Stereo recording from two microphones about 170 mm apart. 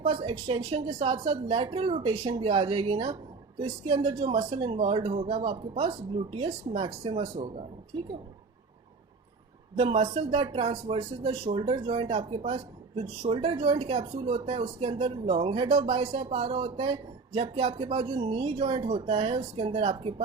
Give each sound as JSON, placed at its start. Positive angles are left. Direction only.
{"t": 0.0, "sound": "speech", "side_deg": -35}
{"t": 9.7, "sound": "speech", "side_deg": -40}